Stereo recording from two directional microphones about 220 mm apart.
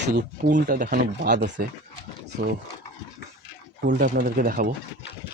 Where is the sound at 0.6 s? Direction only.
40° right (ahead or behind).